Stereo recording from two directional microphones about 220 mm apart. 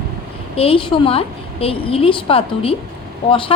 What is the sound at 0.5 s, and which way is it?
A woman's voice, 25° left (ahead or behind).